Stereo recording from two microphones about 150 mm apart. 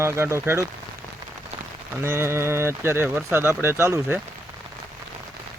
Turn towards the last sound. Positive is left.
turn(degrees=-15)  # may be behind; listen again after turning